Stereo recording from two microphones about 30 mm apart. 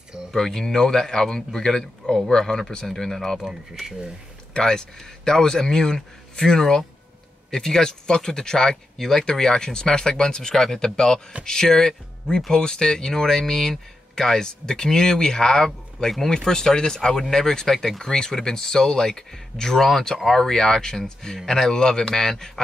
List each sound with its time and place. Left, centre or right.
0.3 s speech: centre
4.6 s speech: left